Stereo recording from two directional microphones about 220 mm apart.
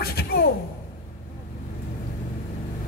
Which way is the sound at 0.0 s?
45° left (ahead or behind).